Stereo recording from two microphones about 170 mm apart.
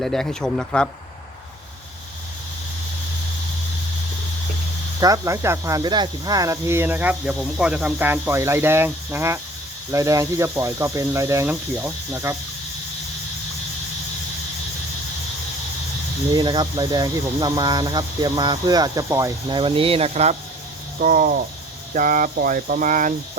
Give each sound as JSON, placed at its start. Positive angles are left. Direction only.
{"t": 0.0, "sound": "a man's voice", "side_deg": 5}
{"t": 4.9, "sound": "speech", "side_deg": -20}
{"t": 16.3, "sound": "speech", "side_deg": -25}
{"t": 21.0, "sound": "cricket", "side_deg": -55}
{"t": 21.9, "sound": "speech", "side_deg": -55}